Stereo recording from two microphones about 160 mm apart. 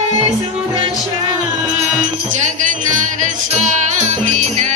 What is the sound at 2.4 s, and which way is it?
Music, 50° right (ahead or behind).